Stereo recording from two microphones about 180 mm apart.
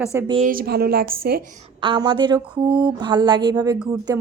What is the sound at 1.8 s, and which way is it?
Speech, 25° right (ahead or behind).